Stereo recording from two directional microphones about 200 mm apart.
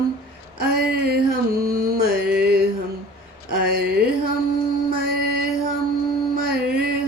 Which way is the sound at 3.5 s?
50° right (ahead or behind).